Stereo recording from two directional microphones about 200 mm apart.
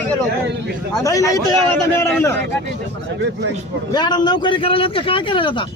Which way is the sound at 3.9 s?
20° left (ahead or behind).